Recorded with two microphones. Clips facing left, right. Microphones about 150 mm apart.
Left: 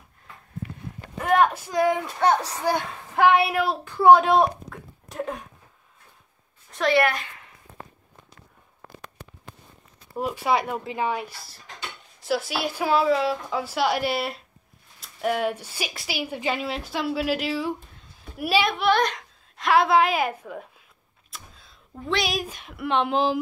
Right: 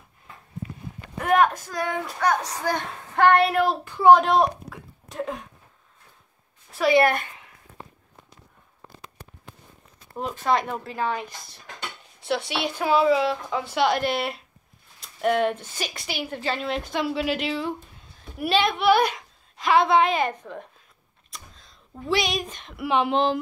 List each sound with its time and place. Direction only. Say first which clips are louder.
1.1 s a sound: even; centre (ahead or behind)
1.7 s a child's voice: left 6 dB; 20° left (ahead or behind)
2.6 s speech: left 2 dB; 10° left (ahead or behind)
6.7 s a woman's voice: right 2 dB; 5° right (ahead or behind)
10.1 s a woman's voice: even; 5° left (ahead or behind)